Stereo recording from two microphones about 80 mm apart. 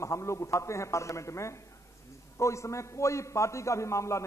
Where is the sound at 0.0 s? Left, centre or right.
Left.